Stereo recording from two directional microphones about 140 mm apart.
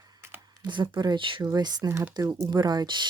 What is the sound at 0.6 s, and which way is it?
Speech, 30° right (ahead or behind).